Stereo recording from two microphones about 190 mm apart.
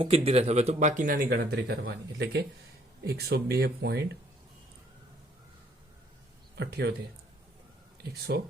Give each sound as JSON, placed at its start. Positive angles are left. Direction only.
{"t": 0.3, "sound": "speech", "side_deg": -35}
{"t": 1.3, "sound": "speech", "side_deg": -60}
{"t": 6.6, "sound": "speech", "side_deg": -60}
{"t": 8.3, "sound": "speech", "side_deg": -60}